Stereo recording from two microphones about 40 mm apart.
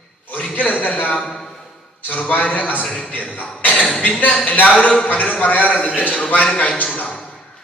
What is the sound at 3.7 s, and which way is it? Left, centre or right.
Speech, left.